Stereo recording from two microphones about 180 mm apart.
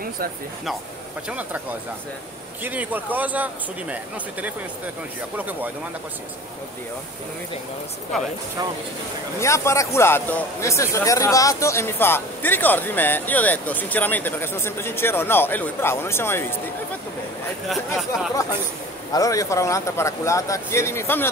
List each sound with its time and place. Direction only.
2.6 s speech: 10° right (ahead or behind)
9.4 s a man's voice: 15° left (ahead or behind)
17.6 s speech: centre (ahead or behind)
19.1 s a man's voice: 20° left (ahead or behind)